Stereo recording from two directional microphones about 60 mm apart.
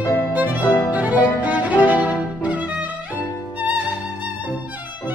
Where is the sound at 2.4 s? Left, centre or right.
Right.